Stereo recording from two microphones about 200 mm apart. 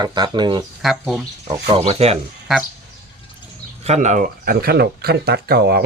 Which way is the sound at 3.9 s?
35° right (ahead or behind).